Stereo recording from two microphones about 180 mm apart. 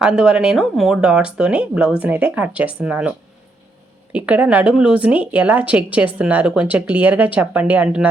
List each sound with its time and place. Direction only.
0.0 s speech: 5° right (ahead or behind)